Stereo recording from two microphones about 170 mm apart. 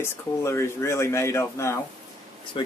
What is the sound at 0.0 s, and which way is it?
Speech, 15° left (ahead or behind).